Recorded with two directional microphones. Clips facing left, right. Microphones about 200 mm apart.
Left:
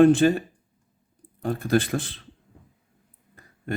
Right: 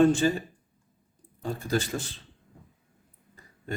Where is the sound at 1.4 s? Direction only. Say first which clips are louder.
Left 6 dB; 60° left (ahead or behind).